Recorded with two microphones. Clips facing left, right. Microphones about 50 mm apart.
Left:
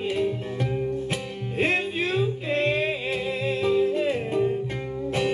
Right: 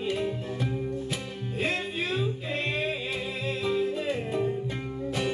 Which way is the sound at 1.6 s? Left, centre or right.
Left.